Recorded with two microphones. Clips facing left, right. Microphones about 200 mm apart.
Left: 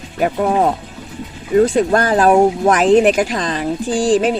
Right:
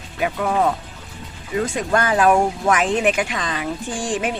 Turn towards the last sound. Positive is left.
turn(degrees=35)  # may be behind; listen again after turning